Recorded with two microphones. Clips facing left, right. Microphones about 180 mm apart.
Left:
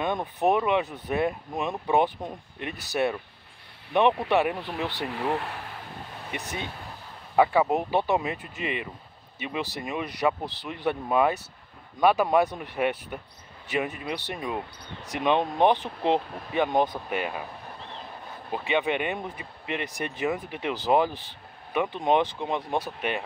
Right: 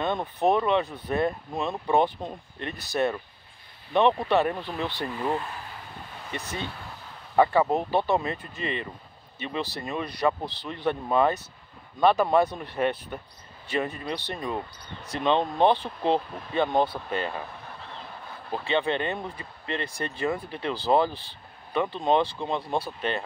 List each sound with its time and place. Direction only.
0.0 s speech: 15° left (ahead or behind)
5.3 s speech: 65° left (ahead or behind)
6.3 s speech: 15° left (ahead or behind)
18.5 s speech: 15° left (ahead or behind)